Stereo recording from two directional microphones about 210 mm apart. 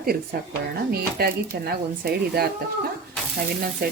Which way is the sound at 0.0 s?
45° right (ahead or behind).